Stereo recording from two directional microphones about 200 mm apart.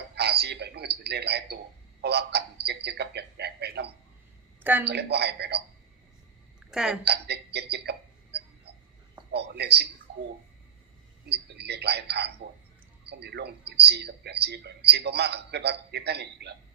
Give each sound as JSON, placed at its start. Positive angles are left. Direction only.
{"t": 0.2, "sound": "radio", "side_deg": -55}
{"t": 1.0, "sound": "speech", "side_deg": -55}
{"t": 2.0, "sound": "a sound", "side_deg": -55}
{"t": 4.6, "sound": "a woman's voice", "side_deg": -10}
{"t": 4.9, "sound": "speech", "side_deg": -55}
{"t": 6.6, "sound": "a sound", "side_deg": -5}
{"t": 7.0, "sound": "a sound", "side_deg": -55}
{"t": 9.3, "sound": "speech", "side_deg": -55}
{"t": 11.3, "sound": "a man's voice", "side_deg": -55}